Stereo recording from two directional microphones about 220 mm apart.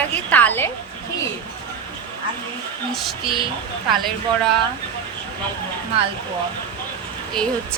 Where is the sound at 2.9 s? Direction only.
Centre (ahead or behind).